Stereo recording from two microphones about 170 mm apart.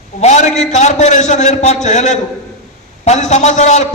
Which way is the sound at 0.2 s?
40° left (ahead or behind).